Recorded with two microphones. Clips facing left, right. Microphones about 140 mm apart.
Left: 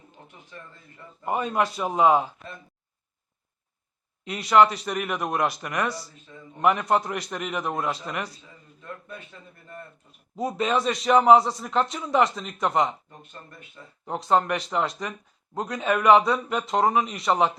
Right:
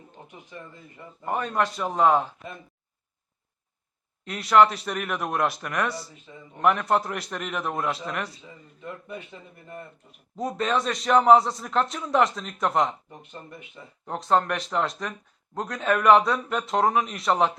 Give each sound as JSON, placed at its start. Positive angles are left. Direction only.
{"t": 1.2, "sound": "a man's voice", "side_deg": 10}
{"t": 4.2, "sound": "a man's voice", "side_deg": 0}
{"t": 8.8, "sound": "a man's voice", "side_deg": -15}
{"t": 10.3, "sound": "a man's voice", "side_deg": 5}
{"t": 13.1, "sound": "a man's voice", "side_deg": -15}
{"t": 14.0, "sound": "a man's voice", "side_deg": 5}